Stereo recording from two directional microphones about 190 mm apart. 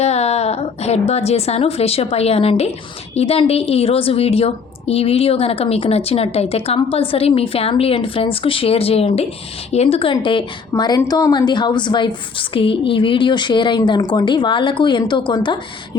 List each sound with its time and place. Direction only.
0.0 s a woman's voice: 35° left (ahead or behind)